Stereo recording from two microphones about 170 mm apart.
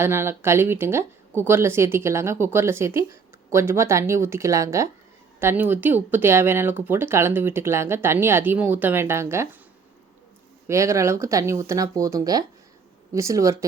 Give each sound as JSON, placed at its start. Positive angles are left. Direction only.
{"t": 0.0, "sound": "speech", "side_deg": -15}
{"t": 10.7, "sound": "speech", "side_deg": -15}